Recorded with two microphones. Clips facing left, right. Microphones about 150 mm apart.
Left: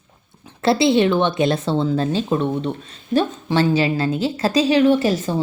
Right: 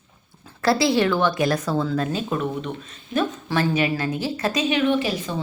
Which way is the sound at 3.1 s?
50° left (ahead or behind).